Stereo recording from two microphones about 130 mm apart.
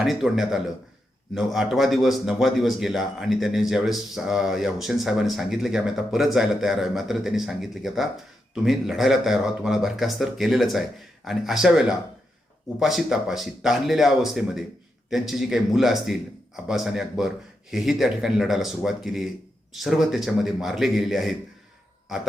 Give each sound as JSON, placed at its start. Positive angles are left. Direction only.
{"t": 0.0, "sound": "speech", "side_deg": -5}